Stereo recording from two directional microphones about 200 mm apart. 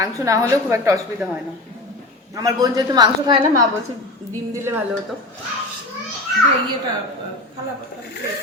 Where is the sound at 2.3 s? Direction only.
20° right (ahead or behind).